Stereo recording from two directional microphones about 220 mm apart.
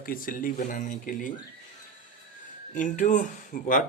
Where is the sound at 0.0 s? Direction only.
40° left (ahead or behind).